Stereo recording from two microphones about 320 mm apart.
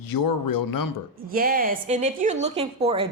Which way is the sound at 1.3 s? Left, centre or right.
Right.